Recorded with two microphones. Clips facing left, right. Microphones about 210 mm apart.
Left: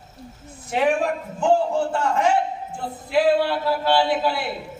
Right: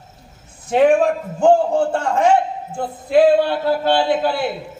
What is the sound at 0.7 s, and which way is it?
A man's voice, 50° right (ahead or behind).